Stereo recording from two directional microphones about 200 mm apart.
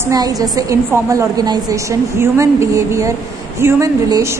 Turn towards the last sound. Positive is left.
turn(degrees=-15)  # may be behind; listen again after turning